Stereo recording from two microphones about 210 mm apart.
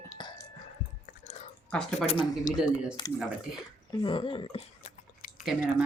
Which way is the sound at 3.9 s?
20° left (ahead or behind).